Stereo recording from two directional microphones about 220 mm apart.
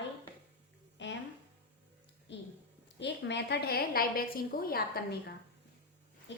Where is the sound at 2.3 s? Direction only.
55° left (ahead or behind).